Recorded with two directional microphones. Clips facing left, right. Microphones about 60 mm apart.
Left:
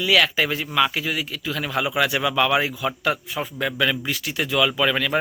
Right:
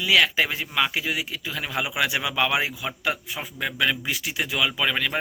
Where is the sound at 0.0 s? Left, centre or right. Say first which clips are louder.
Left 1 dB; centre.